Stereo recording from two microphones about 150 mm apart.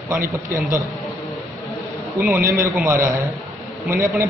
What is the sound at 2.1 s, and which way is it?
A man's voice, 10° right (ahead or behind).